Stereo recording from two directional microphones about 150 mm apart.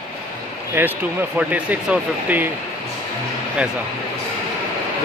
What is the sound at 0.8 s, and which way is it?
Speech, 15° right (ahead or behind).